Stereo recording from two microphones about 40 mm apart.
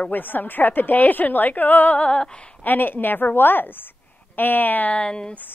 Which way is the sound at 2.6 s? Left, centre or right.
Left.